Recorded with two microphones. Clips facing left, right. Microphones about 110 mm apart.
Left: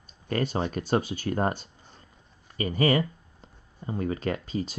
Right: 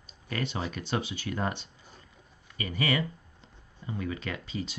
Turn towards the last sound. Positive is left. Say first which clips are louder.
# left 6 dB
turn(degrees=45)  # may be behind; listen again after turning